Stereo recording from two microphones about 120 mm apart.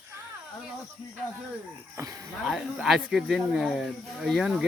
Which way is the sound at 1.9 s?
30° right (ahead or behind).